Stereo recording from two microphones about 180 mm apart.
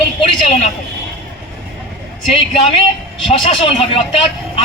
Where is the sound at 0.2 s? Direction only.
40° left (ahead or behind).